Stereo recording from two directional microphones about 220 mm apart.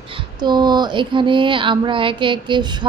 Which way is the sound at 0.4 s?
20° right (ahead or behind).